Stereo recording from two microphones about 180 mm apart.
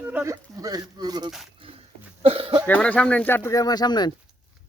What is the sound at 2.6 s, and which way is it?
Speech, 10° left (ahead or behind).